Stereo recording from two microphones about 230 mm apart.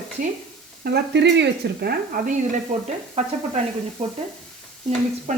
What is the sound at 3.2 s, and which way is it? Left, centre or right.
Speech, right.